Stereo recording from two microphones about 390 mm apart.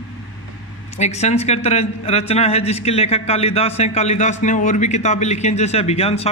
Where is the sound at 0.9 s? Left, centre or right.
Centre.